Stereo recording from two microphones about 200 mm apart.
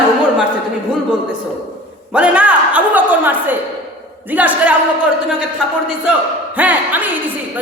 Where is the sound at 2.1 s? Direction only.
5° right (ahead or behind).